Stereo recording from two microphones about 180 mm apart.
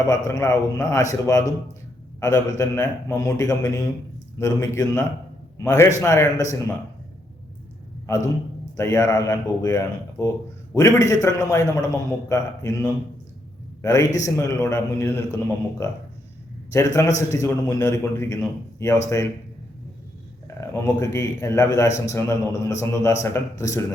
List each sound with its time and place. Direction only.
0.1 s a man's voice: 15° left (ahead or behind)
8.7 s a man's voice: 15° left (ahead or behind)
20.6 s a man's voice: 15° left (ahead or behind)